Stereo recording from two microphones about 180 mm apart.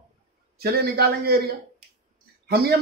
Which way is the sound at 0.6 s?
60° right (ahead or behind).